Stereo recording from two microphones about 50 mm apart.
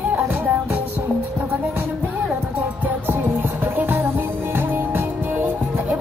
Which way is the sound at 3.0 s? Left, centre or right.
Right.